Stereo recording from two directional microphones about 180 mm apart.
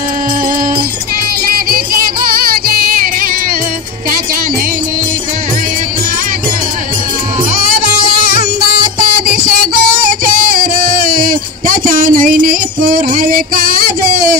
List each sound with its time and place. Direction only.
2.5 s music: 55° right (ahead or behind)
7.7 s music: 55° right (ahead or behind)